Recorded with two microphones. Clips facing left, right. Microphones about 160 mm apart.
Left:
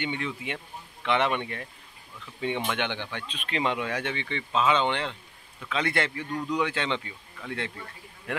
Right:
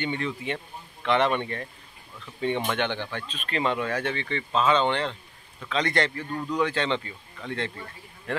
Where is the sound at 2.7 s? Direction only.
15° left (ahead or behind).